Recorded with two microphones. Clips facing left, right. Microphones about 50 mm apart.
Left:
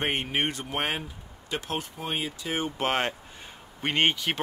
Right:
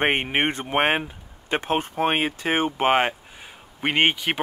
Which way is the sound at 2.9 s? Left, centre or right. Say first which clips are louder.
Right 7 dB; centre.